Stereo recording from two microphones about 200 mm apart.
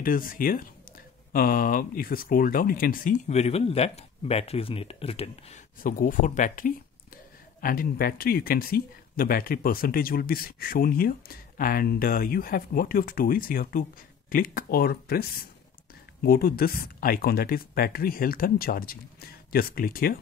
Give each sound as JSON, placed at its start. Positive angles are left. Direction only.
{"t": 0.0, "sound": "speech", "side_deg": 45}
{"t": 5.8, "sound": "speech", "side_deg": 45}